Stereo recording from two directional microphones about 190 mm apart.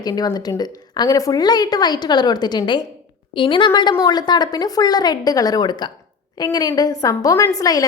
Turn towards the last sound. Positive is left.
turn(degrees=20)  # may be behind; listen again after turning